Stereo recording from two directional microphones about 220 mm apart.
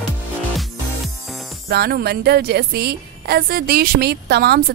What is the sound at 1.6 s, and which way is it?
A woman's voice, 45° right (ahead or behind).